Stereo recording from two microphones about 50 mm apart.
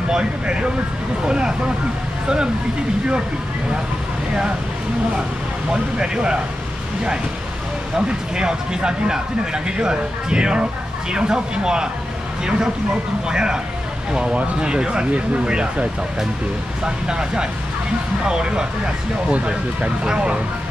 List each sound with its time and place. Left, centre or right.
0.1 s speech: centre
5.7 s speech: centre
7.9 s speech: centre